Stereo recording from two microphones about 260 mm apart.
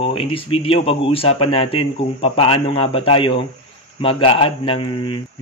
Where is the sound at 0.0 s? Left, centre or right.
Left.